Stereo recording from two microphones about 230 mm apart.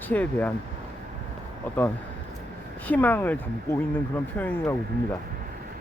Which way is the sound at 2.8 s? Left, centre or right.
Centre.